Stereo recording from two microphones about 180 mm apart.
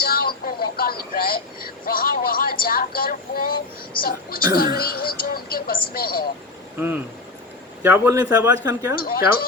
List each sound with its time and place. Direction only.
0.0 s speech: 55° left (ahead or behind)
6.7 s speech: 10° right (ahead or behind)
9.0 s speech: 55° left (ahead or behind)